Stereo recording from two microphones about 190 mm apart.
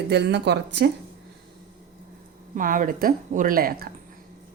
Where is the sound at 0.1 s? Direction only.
65° right (ahead or behind).